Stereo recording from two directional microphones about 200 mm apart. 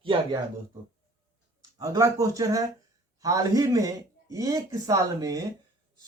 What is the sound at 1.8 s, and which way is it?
Speech, 15° right (ahead or behind).